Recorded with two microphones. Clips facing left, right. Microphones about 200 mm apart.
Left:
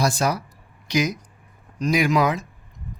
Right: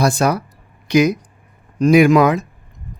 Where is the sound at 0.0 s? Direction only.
60° right (ahead or behind).